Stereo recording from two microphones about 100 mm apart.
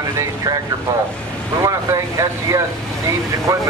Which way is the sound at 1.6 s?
30° right (ahead or behind).